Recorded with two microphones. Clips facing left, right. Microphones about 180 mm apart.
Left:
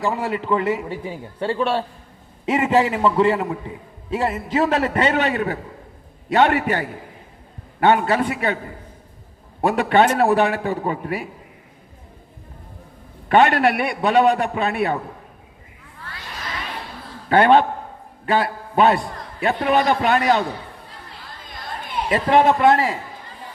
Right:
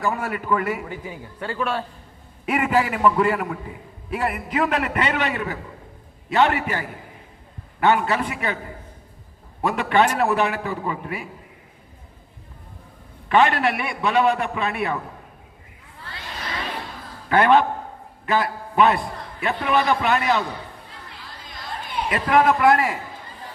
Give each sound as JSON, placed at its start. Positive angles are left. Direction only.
{"t": 0.0, "sound": "a man's voice", "side_deg": 25}
{"t": 9.6, "sound": "a man's voice", "side_deg": 35}
{"t": 13.2, "sound": "a man's voice", "side_deg": 45}
{"t": 17.2, "sound": "a man's voice", "side_deg": 30}
{"t": 22.1, "sound": "a man's voice", "side_deg": 25}